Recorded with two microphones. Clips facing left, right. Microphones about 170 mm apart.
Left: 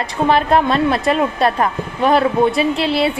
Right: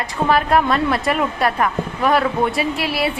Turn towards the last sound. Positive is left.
turn(degrees=25)  # may be behind; listen again after turning